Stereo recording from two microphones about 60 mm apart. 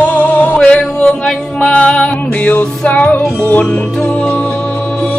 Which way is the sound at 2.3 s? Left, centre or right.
Left.